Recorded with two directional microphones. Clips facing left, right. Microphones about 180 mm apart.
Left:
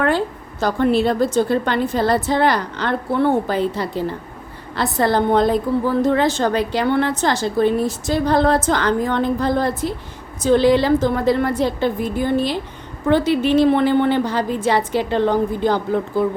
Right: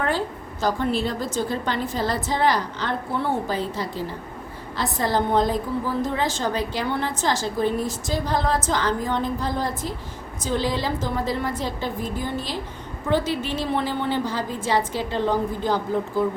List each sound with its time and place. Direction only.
0.6 s a woman's voice: 65° left (ahead or behind)